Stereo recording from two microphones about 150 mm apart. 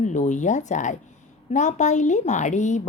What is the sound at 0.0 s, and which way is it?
A woman's voice, 55° left (ahead or behind).